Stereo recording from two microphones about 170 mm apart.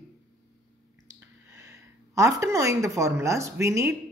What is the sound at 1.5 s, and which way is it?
A woman's voice, 20° right (ahead or behind).